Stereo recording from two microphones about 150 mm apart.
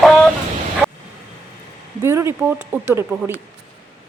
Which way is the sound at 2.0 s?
20° right (ahead or behind).